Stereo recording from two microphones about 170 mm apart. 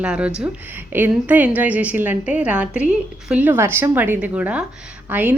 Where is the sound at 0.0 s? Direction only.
5° right (ahead or behind).